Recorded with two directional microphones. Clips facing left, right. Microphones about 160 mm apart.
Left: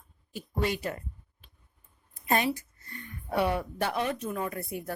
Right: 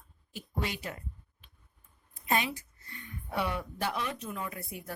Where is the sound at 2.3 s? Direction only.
45° left (ahead or behind).